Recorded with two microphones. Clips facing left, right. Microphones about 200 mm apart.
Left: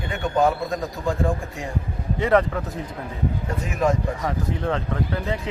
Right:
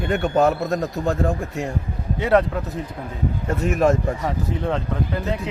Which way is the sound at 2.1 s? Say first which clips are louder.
Right 1 dB; 5° right (ahead or behind).